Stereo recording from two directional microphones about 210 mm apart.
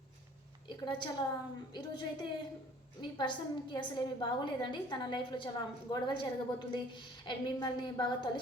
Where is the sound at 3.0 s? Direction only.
20° left (ahead or behind).